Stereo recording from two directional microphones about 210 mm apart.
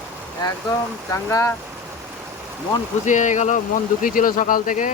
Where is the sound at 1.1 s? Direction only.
15° left (ahead or behind).